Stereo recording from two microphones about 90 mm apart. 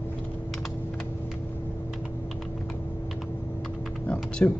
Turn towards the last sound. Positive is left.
turn(degrees=15)  # may be behind; listen again after turning